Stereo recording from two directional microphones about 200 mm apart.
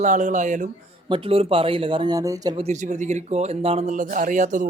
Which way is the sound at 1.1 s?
25° right (ahead or behind).